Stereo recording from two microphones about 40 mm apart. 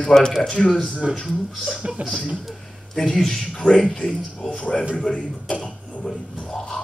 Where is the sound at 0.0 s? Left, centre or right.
Centre.